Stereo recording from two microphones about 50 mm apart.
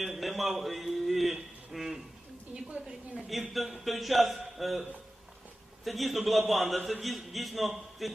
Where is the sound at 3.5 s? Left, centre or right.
Centre.